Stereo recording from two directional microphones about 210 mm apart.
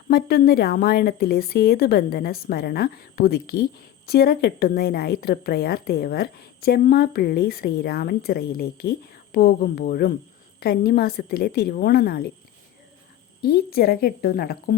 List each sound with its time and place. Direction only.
0.1 s a woman's voice: 50° left (ahead or behind)
13.4 s a woman's voice: 45° left (ahead or behind)